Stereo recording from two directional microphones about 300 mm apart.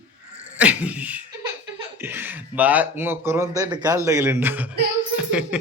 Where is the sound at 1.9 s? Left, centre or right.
Centre.